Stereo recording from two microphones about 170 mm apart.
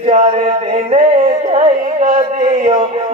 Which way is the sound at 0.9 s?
40° right (ahead or behind).